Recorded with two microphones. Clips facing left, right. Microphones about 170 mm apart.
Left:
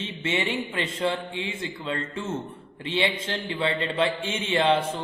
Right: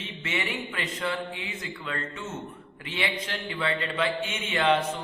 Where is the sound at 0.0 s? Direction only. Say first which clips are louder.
Left 5 dB; 25° left (ahead or behind).